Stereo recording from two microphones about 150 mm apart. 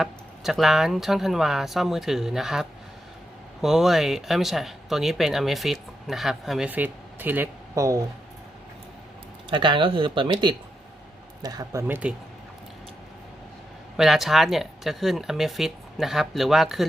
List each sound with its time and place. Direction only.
0.0 s speech: centre (ahead or behind); by 8.0 s 20° right (ahead or behind)
9.5 s speech: 35° right (ahead or behind)
11.4 s speech: 25° right (ahead or behind)
13.9 s speech: centre (ahead or behind)